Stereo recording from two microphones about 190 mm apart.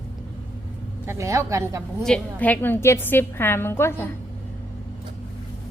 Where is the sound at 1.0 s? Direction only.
15° right (ahead or behind).